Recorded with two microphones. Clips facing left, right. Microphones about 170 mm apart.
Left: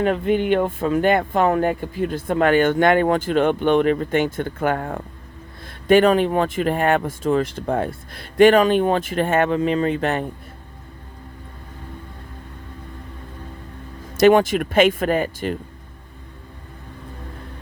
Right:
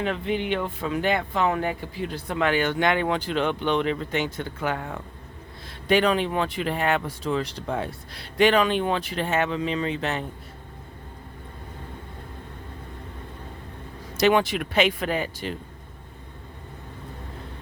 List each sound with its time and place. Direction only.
0.0 s speech: 50° left (ahead or behind)
14.1 s speech: 50° left (ahead or behind)